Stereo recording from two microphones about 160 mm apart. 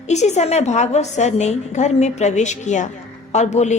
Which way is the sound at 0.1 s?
45° left (ahead or behind).